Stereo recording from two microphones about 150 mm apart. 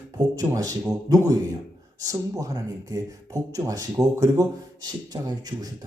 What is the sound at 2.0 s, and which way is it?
A man's voice, 20° right (ahead or behind).